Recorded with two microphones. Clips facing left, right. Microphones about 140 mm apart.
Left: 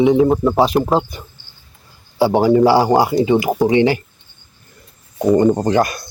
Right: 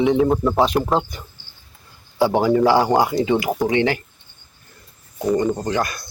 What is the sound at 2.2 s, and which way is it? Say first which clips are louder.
Speech: left 4 dB; 5° left (ahead or behind).